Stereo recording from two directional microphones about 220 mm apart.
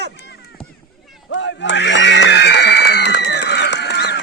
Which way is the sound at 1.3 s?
55° left (ahead or behind).